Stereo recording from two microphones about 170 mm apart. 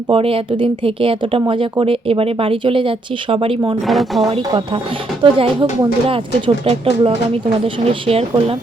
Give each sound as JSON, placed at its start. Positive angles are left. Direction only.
{"t": 0.1, "sound": "speech", "side_deg": -35}
{"t": 3.8, "sound": "speech", "side_deg": 0}
{"t": 4.3, "sound": "speech", "side_deg": -30}